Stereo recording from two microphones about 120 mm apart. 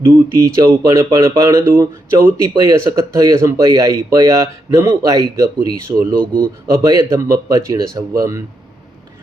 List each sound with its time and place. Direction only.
0.1 s speech: 25° right (ahead or behind)
6.1 s speech: 10° left (ahead or behind)
6.7 s speech: 30° right (ahead or behind)